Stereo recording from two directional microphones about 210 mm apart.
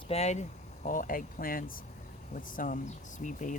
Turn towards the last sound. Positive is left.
turn(degrees=40)  # may be behind; listen again after turning